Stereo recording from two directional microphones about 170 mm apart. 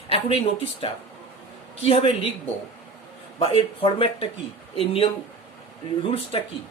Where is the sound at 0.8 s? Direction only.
35° left (ahead or behind).